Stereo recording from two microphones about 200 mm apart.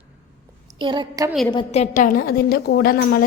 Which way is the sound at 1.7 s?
35° left (ahead or behind).